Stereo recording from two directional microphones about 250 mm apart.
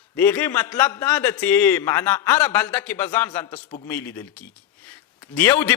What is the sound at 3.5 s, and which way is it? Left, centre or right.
Speech, centre.